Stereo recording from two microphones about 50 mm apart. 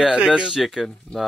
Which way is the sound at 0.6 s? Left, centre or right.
Centre.